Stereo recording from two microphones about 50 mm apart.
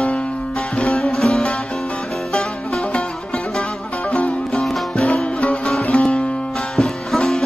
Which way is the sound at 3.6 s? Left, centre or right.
Left.